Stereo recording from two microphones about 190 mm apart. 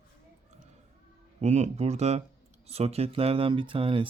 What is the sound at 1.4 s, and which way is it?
Speech, 35° right (ahead or behind).